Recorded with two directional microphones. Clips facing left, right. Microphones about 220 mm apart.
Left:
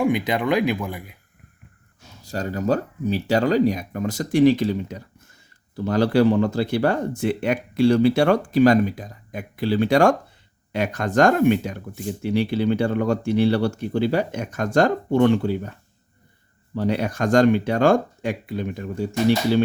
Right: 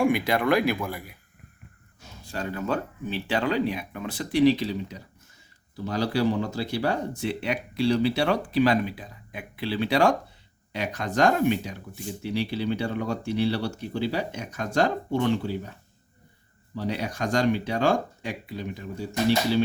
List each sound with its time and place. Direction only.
0.1 s speech: 20° left (ahead or behind)
2.2 s speech: 40° left (ahead or behind)
16.7 s speech: 55° left (ahead or behind)